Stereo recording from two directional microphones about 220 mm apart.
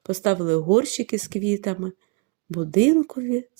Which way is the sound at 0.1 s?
30° right (ahead or behind).